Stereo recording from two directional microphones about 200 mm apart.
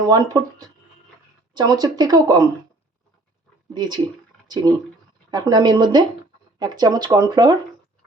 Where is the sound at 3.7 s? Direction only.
20° right (ahead or behind).